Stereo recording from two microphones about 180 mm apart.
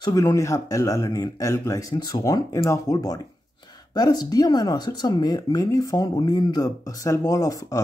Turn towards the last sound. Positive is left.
turn(degrees=20)  # may be behind; listen again after turning